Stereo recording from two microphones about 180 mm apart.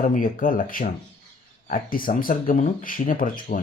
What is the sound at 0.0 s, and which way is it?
Speech, 50° left (ahead or behind).